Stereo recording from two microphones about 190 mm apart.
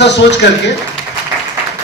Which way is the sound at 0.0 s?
65° left (ahead or behind).